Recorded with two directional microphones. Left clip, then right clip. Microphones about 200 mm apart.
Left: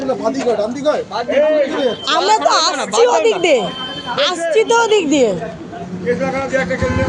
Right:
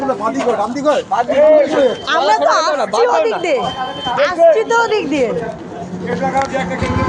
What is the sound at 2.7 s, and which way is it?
Speech, 55° left (ahead or behind).